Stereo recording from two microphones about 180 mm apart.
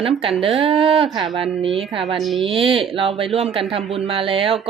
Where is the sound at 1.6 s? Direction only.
30° right (ahead or behind).